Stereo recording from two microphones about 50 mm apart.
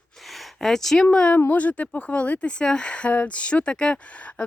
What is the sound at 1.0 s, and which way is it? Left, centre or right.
Speech, left.